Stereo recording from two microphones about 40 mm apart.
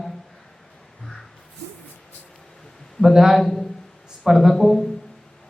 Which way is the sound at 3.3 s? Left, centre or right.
Centre.